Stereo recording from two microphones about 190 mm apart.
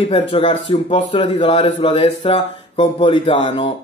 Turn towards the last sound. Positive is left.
turn(degrees=25)  # may be behind; listen again after turning